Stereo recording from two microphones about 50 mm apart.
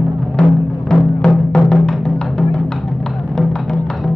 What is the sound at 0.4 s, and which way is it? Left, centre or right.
Music, centre.